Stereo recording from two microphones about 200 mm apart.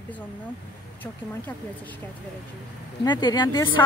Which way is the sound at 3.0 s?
20° left (ahead or behind).